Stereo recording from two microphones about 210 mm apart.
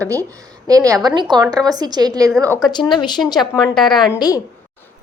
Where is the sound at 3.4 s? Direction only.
Centre (ahead or behind).